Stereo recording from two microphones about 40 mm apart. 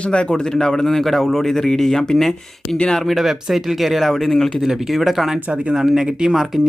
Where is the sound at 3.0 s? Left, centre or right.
Centre.